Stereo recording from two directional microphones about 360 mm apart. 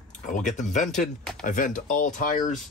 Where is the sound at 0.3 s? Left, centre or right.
Left.